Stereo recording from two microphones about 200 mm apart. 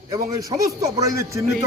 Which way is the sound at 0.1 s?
15° right (ahead or behind).